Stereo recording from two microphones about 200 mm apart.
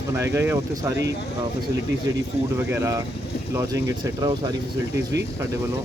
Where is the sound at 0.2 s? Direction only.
15° right (ahead or behind).